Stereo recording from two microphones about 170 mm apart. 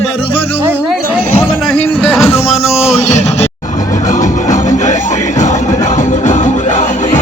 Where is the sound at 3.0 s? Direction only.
40° left (ahead or behind).